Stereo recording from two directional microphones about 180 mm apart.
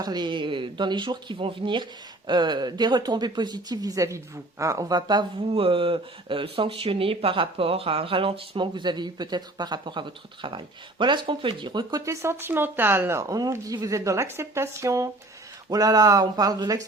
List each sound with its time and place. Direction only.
0.0 s speech: 25° right (ahead or behind)